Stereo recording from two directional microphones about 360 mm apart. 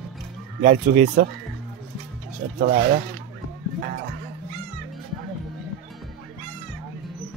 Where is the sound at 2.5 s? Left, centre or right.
Right.